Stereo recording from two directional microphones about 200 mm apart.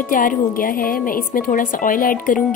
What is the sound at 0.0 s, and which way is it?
A woman's voice, 45° left (ahead or behind).